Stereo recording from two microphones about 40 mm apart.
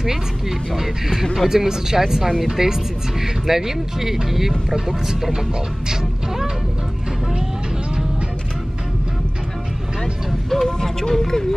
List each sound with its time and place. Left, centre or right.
0.0 s speech: centre
1.5 s speech: centre
10.5 s speech: centre